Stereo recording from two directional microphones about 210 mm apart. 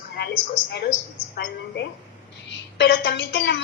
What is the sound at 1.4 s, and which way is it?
A woman's voice, 50° left (ahead or behind).